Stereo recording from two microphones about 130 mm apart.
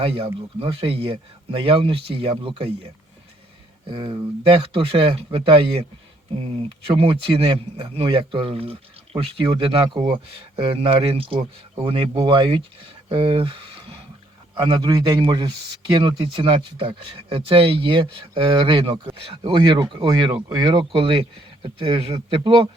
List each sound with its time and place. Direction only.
0.0 s speech: 45° right (ahead or behind)
14.6 s speech: 30° right (ahead or behind)